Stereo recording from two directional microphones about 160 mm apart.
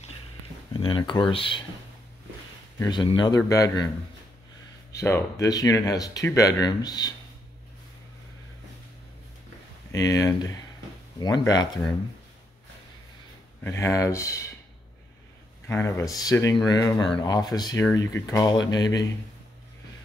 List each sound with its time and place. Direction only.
0.7 s speech: 35° left (ahead or behind)
2.9 s speech: 30° left (ahead or behind)
5.0 s speech: 20° left (ahead or behind)
9.9 s speech: 20° left (ahead or behind)
13.7 s speech: 15° left (ahead or behind)
15.7 s speech: 15° left (ahead or behind)